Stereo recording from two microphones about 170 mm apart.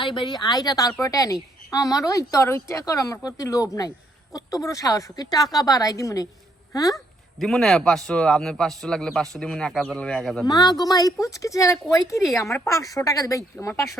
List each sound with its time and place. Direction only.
0.0 s speech: 30° left (ahead or behind)
6.9 s speech: centre (ahead or behind)
10.4 s speech: 25° left (ahead or behind)